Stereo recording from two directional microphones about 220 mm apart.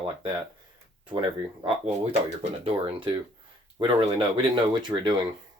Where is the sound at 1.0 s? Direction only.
20° right (ahead or behind).